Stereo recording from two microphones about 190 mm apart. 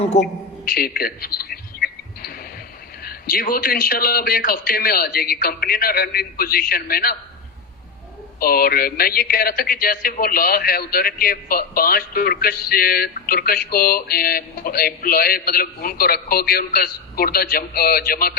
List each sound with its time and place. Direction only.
0.2 s a sound: 50° left (ahead or behind)
3.0 s speech: 50° left (ahead or behind)
8.4 s speech: 50° left (ahead or behind)